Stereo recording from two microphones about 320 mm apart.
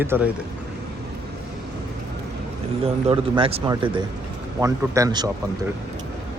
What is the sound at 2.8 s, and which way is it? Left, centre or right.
Speech, centre.